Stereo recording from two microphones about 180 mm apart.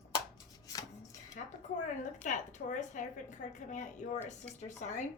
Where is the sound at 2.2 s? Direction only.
45° left (ahead or behind).